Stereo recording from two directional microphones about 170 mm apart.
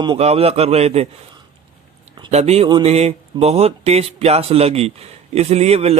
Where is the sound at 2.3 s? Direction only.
40° right (ahead or behind).